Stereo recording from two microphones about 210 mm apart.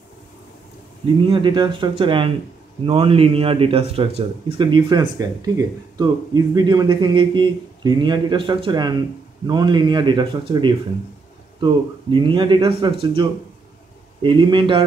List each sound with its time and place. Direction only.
1.3 s speech: 20° right (ahead or behind)